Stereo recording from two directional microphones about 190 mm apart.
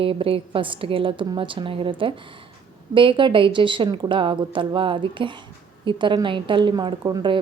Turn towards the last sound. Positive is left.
turn(degrees=-25)  # may be behind; listen again after turning